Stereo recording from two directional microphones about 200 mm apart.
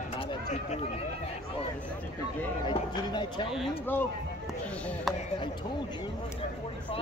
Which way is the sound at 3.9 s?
10° left (ahead or behind).